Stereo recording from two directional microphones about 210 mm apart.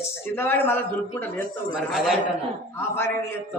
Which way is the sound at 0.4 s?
10° left (ahead or behind).